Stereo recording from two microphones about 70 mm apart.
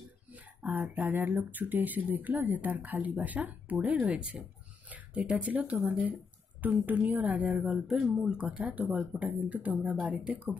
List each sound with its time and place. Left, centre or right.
0.7 s speech: right
4.8 s a sound: centre
5.9 s speech: right